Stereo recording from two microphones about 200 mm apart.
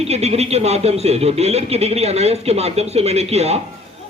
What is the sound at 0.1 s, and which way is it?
Speech, 30° right (ahead or behind).